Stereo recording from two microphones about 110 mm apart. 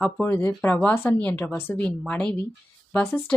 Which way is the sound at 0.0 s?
20° left (ahead or behind).